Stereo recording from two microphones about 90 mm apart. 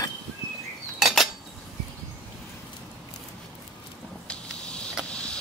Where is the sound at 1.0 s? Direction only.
Centre (ahead or behind).